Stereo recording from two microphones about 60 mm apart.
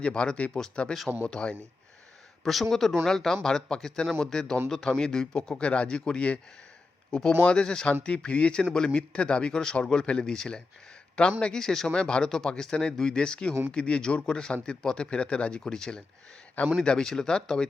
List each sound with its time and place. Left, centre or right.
0.0 s a man's voice: centre
2.4 s a man's voice: centre
15.6 s a man's voice: centre